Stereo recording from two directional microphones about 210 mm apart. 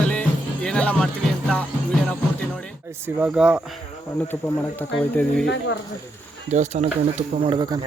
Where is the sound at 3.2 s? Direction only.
5° right (ahead or behind).